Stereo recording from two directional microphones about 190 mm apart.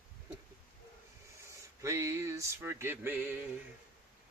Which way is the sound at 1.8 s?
15° right (ahead or behind).